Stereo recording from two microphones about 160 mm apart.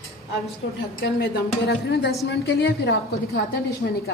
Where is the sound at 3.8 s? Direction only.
80° left.